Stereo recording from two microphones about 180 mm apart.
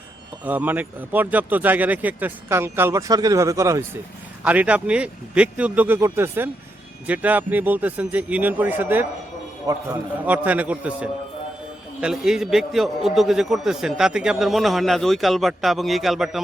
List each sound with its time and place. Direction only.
0.4 s a man's voice: 10° right (ahead or behind)
10.2 s a man's voice: 10° right (ahead or behind)